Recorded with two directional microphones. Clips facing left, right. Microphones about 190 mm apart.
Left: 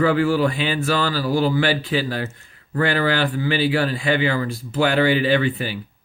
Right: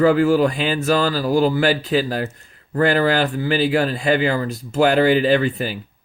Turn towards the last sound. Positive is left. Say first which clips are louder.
# right 2 dB
turn(degrees=-40)  # may be behind; listen again after turning